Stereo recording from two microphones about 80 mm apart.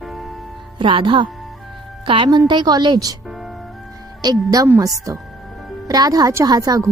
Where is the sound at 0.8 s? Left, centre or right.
Right.